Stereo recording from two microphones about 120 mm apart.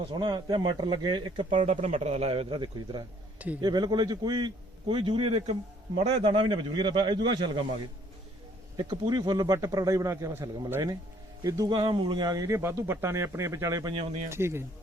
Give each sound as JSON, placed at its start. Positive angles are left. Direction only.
{"t": 0.0, "sound": "a man's voice", "side_deg": -45}
{"t": 1.5, "sound": "a man's voice", "side_deg": -90}
{"t": 3.3, "sound": "speech", "side_deg": -10}
{"t": 3.6, "sound": "a man's voice", "side_deg": -35}
{"t": 8.7, "sound": "speech", "side_deg": -40}
{"t": 13.9, "sound": "a man's voice", "side_deg": -60}
{"t": 14.3, "sound": "speech", "side_deg": -20}